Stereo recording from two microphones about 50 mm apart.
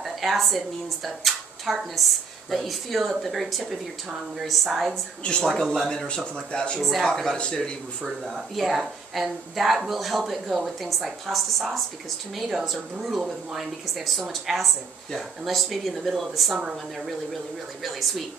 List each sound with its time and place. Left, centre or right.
0.0 s a woman's voice: centre
5.5 s speech: centre
6.8 s a man's voice: centre
8.0 s speech: centre
17.8 s speech: centre